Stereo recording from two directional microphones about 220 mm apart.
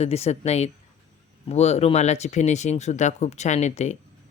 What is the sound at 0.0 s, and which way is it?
Speech, 30° left (ahead or behind).